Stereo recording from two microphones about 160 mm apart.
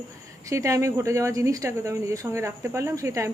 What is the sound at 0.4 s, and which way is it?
Speech, 20° right (ahead or behind).